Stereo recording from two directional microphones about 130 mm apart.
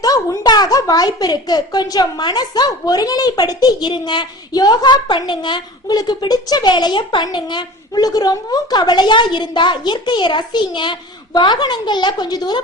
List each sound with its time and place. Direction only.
0.0 s a woman's voice: 30° left (ahead or behind)